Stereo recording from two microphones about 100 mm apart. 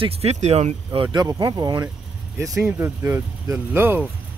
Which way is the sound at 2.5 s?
15° right (ahead or behind).